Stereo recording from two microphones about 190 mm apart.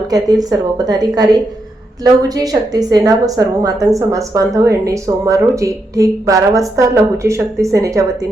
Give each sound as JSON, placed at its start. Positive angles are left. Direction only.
{"t": 0.1, "sound": "a woman's voice", "side_deg": -20}